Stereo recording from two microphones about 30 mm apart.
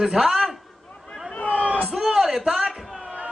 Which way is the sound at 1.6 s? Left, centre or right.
Right.